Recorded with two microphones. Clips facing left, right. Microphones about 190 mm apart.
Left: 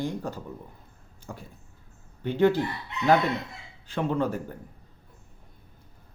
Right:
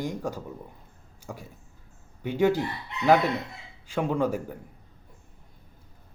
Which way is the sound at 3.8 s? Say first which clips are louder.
Right 1 dB; 10° right (ahead or behind).